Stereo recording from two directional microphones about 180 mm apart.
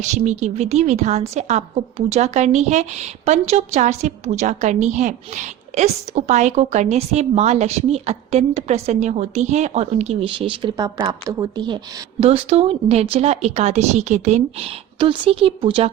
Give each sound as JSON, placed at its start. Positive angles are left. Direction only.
{"t": 0.0, "sound": "a woman's voice", "side_deg": -40}